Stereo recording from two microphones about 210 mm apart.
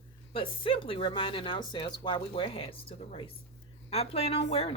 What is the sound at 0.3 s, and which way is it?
Speech, 25° left (ahead or behind).